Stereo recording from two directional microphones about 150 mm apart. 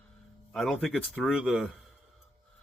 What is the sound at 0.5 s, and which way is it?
Speech, centre (ahead or behind).